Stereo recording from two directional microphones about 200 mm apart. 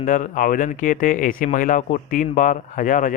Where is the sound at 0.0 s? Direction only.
40° left (ahead or behind).